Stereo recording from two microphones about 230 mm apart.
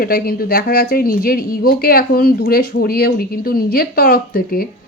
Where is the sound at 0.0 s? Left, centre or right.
Left.